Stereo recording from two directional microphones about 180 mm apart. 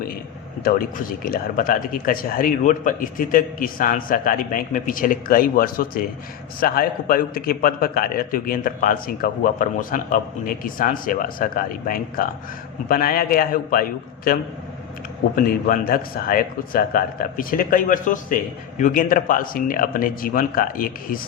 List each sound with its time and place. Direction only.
0.6 s a man's voice: 50° left (ahead or behind)
15.4 s a man's voice: 50° left (ahead or behind)